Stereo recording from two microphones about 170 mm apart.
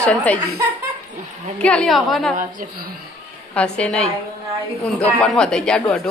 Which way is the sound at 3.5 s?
5° left (ahead or behind).